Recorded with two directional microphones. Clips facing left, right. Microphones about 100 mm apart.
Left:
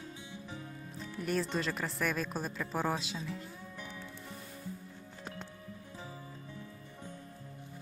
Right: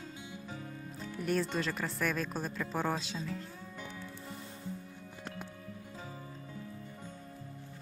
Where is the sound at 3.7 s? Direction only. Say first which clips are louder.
Right 3 dB; 30° right (ahead or behind).